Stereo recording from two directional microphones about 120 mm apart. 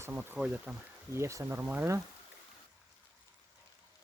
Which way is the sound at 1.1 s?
25° right (ahead or behind).